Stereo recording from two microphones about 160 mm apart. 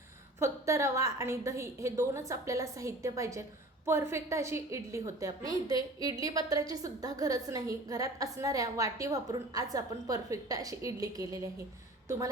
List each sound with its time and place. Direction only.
0.3 s a woman's voice: 15° right (ahead or behind)